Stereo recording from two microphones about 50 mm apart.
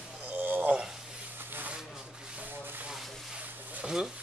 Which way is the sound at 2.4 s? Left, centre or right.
Right.